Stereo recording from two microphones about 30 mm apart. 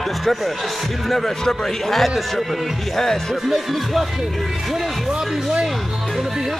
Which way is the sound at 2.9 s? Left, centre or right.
Centre.